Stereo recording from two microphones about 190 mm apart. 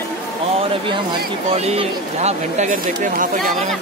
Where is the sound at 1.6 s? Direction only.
35° right (ahead or behind).